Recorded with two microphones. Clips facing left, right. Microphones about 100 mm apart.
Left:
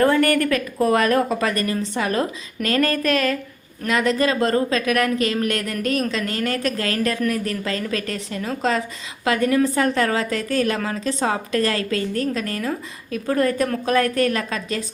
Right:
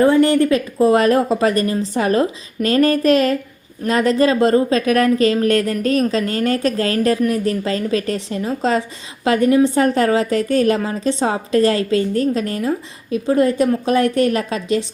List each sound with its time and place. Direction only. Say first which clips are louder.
0.0 s a woman's voice: right 4 dB; 20° right (ahead or behind)